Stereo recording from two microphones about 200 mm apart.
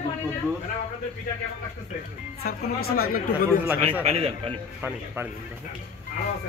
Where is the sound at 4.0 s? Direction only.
30° right (ahead or behind).